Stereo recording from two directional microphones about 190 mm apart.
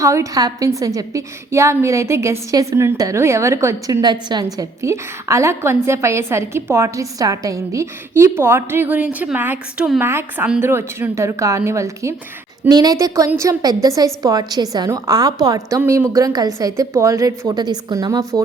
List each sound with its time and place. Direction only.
0.0 s a woman's voice: 15° right (ahead or behind)